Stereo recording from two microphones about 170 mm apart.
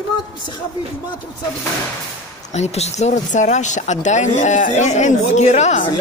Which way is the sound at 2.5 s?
40° left (ahead or behind).